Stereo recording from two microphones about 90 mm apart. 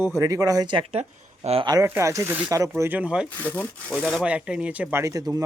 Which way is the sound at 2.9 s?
15° right (ahead or behind).